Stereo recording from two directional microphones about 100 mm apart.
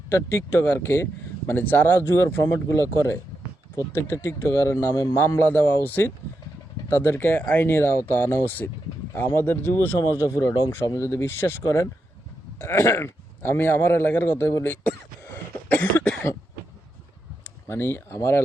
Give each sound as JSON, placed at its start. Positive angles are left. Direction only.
{"t": 0.1, "sound": "a man's voice", "side_deg": 25}
{"t": 10.0, "sound": "a man's voice", "side_deg": 30}
{"t": 15.7, "sound": "cough", "side_deg": 20}
{"t": 17.7, "sound": "a man's voice", "side_deg": 25}